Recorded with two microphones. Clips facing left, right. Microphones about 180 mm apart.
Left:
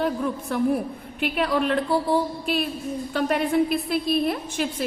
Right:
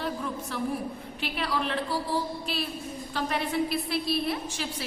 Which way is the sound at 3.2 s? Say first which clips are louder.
Left 7 dB; 55° left (ahead or behind).